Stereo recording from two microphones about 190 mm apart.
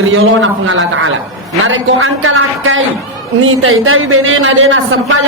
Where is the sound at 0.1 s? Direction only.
90° right.